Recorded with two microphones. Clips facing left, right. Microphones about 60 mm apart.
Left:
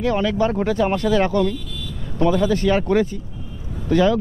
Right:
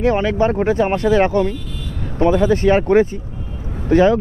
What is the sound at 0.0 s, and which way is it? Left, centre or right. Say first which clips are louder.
Speech: right 3 dB; right.